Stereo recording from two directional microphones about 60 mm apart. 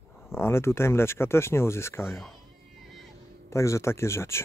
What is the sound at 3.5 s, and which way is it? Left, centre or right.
Speech, left.